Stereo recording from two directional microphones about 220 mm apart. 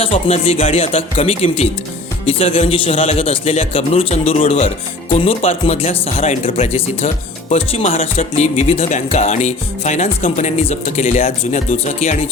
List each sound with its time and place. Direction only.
0.0 s a man's voice: 25° left (ahead or behind)